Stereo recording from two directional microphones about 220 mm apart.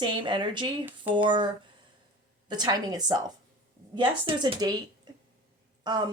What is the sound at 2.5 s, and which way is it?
A woman's voice, 20° right (ahead or behind).